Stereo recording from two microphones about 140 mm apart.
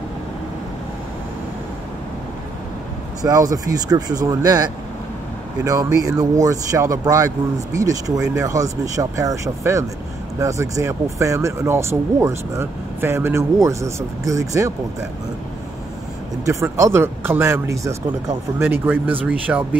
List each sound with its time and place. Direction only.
3.2 s speech: 25° right (ahead or behind)
16.4 s speech: 20° right (ahead or behind)